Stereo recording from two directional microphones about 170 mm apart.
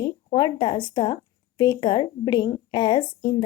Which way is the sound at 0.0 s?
25° left (ahead or behind).